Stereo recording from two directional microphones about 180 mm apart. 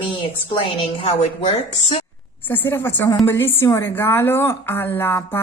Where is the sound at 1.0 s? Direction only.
35° left (ahead or behind).